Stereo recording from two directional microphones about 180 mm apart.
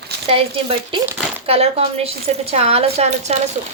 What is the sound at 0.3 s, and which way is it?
A woman's voice, 35° right (ahead or behind).